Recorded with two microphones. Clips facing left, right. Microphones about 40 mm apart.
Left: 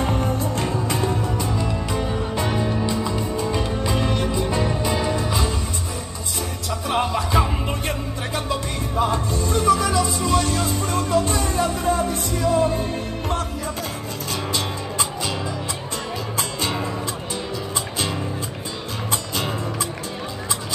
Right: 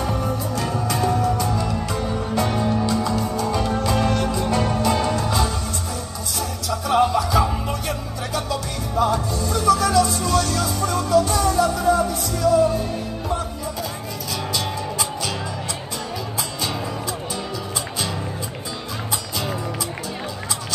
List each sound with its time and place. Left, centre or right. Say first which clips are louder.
0.0 s music: left 1 dB; left
0.9 s music: right 3 dB; centre
6.9 s music: right 4 dB; left